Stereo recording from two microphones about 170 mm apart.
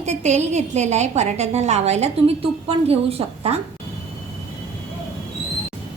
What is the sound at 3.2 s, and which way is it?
Speech, 30° right (ahead or behind).